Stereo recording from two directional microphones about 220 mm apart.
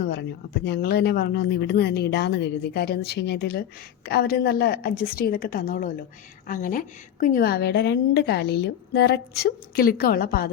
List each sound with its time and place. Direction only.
0.0 s a woman's voice: 50° left (ahead or behind)